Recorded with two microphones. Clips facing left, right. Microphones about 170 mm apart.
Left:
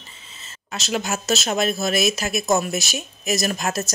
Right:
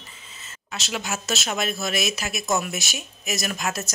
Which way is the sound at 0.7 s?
40° left (ahead or behind).